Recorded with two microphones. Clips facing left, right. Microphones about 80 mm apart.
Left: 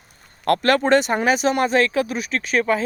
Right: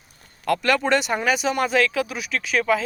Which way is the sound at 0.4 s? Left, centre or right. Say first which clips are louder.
Left 3 dB; left.